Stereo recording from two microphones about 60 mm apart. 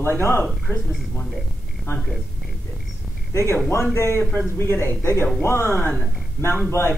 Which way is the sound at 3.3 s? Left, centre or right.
Left.